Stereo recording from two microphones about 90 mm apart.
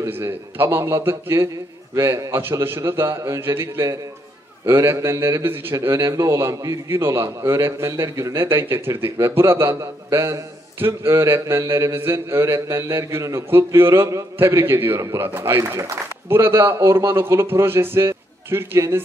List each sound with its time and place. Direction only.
0.0 s speech: 30° right (ahead or behind)
2.0 s a man's voice: 35° right (ahead or behind)
2.4 s speech: 25° right (ahead or behind)